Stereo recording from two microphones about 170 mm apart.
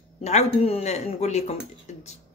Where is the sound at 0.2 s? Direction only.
40° left (ahead or behind).